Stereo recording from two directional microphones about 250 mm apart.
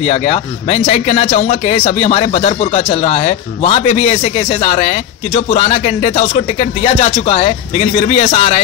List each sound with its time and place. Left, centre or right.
0.0 s speech: left